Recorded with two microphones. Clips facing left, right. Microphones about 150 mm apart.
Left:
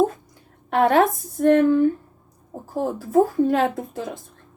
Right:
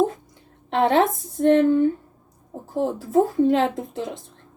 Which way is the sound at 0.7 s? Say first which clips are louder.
Left 1 dB; 25° right (ahead or behind).